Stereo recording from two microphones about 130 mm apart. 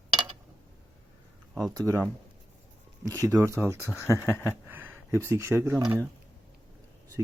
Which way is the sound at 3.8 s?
20° left (ahead or behind).